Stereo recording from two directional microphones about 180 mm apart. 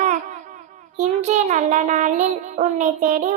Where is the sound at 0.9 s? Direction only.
40° right (ahead or behind).